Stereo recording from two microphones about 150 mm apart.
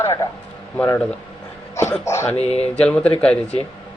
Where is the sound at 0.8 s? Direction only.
10° left (ahead or behind).